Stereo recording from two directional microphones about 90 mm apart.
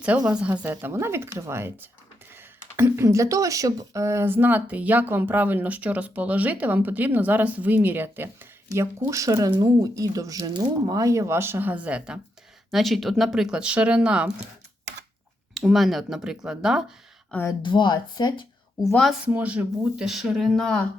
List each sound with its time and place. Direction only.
0.3 s speech: 10° right (ahead or behind)
0.6 s speech: 25° right (ahead or behind)
8.7 s speech: 35° right (ahead or behind); by 12.2 s 10° right (ahead or behind)
12.7 s speech: centre (ahead or behind)
15.5 s speech: centre (ahead or behind)
17.6 s speech: 60° left (ahead or behind)
19.2 s speech: 15° right (ahead or behind); by 20.8 s 5° left (ahead or behind)